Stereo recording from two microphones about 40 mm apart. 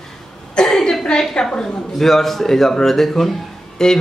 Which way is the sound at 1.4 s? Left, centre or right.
Centre.